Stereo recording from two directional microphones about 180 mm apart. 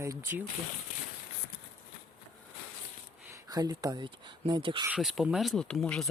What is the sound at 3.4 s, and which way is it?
Speech, 20° right (ahead or behind).